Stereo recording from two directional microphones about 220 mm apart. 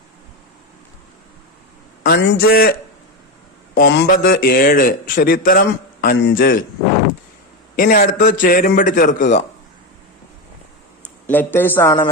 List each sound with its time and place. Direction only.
2.0 s a man's voice: 50° left (ahead or behind)
3.8 s a man's voice: 50° left (ahead or behind)
7.8 s a man's voice: 40° left (ahead or behind)
11.3 s a man's voice: 10° left (ahead or behind)